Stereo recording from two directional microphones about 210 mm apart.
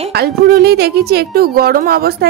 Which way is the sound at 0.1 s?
50° right (ahead or behind).